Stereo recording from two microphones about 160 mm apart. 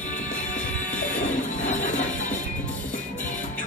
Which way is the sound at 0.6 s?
10° left (ahead or behind).